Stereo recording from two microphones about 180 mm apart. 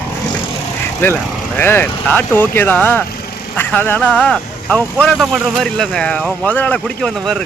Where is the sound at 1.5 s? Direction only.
10° left (ahead or behind).